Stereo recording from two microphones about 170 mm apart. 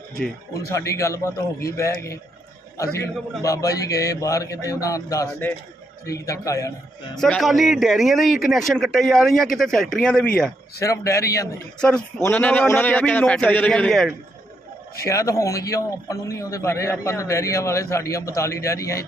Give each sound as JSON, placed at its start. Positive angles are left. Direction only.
{"t": 0.7, "sound": "a man's voice", "side_deg": 15}
{"t": 7.2, "sound": "a man's voice", "side_deg": 5}
{"t": 10.8, "sound": "a man's voice", "side_deg": 15}
{"t": 11.8, "sound": "a man's voice", "side_deg": 5}
{"t": 14.9, "sound": "a man's voice", "side_deg": 20}